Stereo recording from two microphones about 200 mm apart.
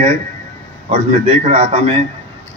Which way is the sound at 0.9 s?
30° right (ahead or behind).